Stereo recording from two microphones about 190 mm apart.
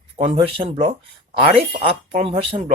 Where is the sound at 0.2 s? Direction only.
25° right (ahead or behind).